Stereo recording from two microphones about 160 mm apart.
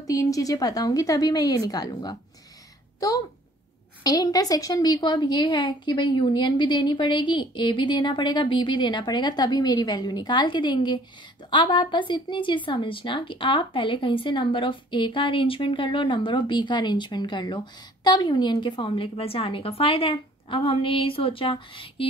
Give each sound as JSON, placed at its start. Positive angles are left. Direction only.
{"t": 0.0, "sound": "a woman's voice", "side_deg": 20}
{"t": 4.0, "sound": "a woman's voice", "side_deg": 25}